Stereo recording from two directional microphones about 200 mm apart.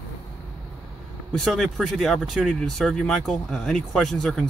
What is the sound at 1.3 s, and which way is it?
Speech, centre (ahead or behind).